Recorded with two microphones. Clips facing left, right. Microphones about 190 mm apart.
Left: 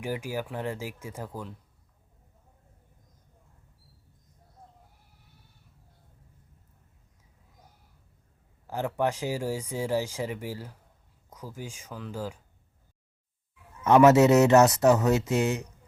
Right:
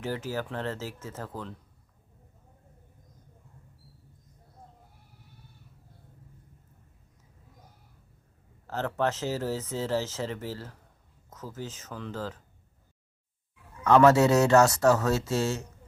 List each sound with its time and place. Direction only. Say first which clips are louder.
0.0 s speech: even; 15° left (ahead or behind)
8.6 s speech: left 1 dB; 10° left (ahead or behind)
13.8 s speech: left 2 dB; 20° left (ahead or behind)